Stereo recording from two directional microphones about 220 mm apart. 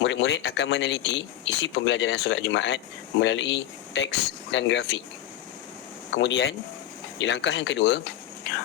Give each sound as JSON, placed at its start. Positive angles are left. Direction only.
{"t": 0.0, "sound": "speech", "side_deg": 55}
{"t": 6.1, "sound": "speech", "side_deg": 55}